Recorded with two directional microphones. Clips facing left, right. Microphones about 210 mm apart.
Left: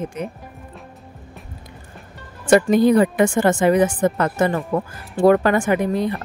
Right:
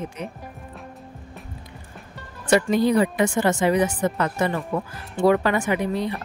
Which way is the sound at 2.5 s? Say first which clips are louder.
Left 5 dB; 45° left (ahead or behind).